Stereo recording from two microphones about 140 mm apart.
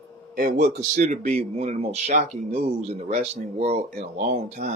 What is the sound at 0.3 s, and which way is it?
Speech, 90° right.